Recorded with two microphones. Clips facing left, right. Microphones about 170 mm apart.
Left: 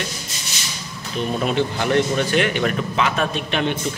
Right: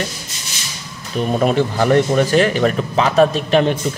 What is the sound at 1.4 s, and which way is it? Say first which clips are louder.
Speech: right 6 dB; 45° right (ahead or behind).